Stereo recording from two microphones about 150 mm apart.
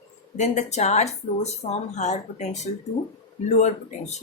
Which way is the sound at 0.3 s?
50° left (ahead or behind).